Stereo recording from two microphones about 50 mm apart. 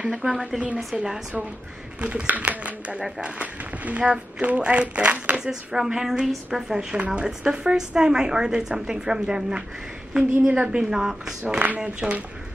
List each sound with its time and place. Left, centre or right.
0.0 s a woman's voice: centre
2.0 s speech: right
3.0 s speech: centre
5.5 s a woman's voice: centre
10.9 s a woman's voice: centre
11.4 s speech: right
11.8 s a woman's voice: centre